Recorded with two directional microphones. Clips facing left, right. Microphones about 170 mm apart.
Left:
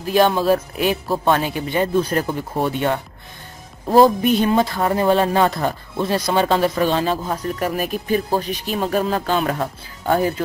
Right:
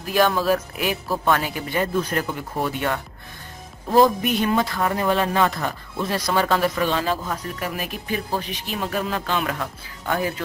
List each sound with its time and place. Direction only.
0.0 s speech: 25° left (ahead or behind)
7.5 s speech: 40° left (ahead or behind)